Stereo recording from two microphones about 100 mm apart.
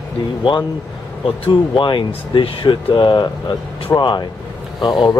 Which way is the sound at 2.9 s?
40° left (ahead or behind).